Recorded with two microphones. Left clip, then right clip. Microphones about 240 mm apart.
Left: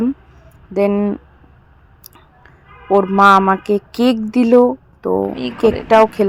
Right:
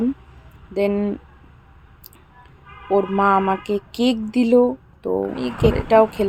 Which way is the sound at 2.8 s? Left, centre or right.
Centre.